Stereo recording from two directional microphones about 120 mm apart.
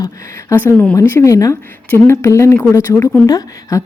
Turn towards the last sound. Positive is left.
turn(degrees=30)  # may be behind; listen again after turning